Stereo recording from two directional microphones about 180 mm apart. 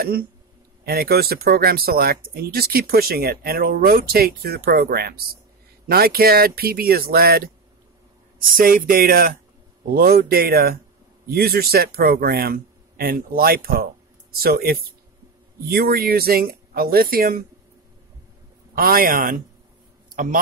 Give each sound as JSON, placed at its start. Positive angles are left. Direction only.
{"t": 0.8, "sound": "speech", "side_deg": -60}
{"t": 8.5, "sound": "speech", "side_deg": -50}
{"t": 18.8, "sound": "speech", "side_deg": -55}
{"t": 20.1, "sound": "a sound", "side_deg": -45}